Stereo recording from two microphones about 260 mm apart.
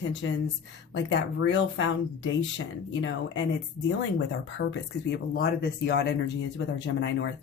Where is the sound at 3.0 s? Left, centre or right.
Left.